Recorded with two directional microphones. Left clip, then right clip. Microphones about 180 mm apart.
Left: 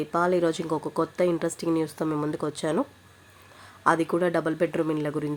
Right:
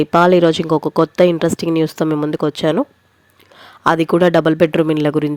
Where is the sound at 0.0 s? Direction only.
50° right (ahead or behind).